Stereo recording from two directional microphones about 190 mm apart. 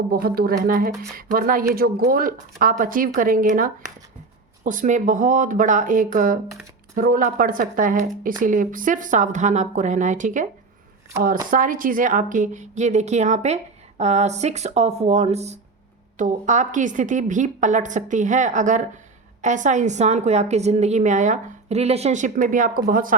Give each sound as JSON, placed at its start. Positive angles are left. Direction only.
{"t": 0.1, "sound": "speech", "side_deg": -50}
{"t": 11.5, "sound": "a woman's voice", "side_deg": -45}